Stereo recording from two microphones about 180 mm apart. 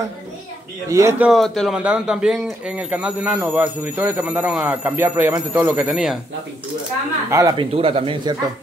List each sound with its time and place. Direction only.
0.8 s a man's voice: 15° right (ahead or behind)
7.2 s a man's voice: 20° right (ahead or behind)
7.7 s speech: 30° right (ahead or behind)